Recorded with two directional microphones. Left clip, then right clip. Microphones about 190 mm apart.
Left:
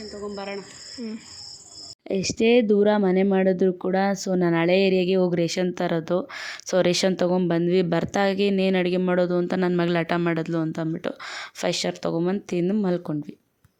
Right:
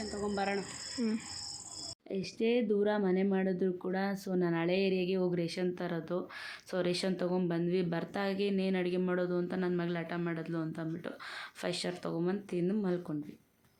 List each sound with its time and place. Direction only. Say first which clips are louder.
0.3 s speech: even; 15° right (ahead or behind)
2.0 s speech: left 12 dB; 55° left (ahead or behind)